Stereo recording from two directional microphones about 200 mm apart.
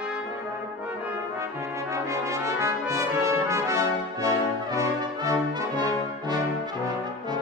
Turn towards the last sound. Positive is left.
turn(degrees=-20)  # may be behind; listen again after turning